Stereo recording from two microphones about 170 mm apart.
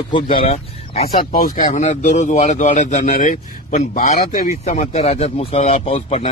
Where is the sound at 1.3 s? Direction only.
55° left (ahead or behind); by 6.3 s 35° left (ahead or behind).